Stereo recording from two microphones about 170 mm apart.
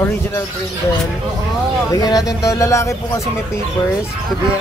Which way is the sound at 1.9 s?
25° left (ahead or behind).